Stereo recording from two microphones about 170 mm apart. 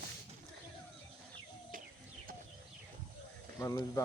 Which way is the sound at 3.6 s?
20° left (ahead or behind).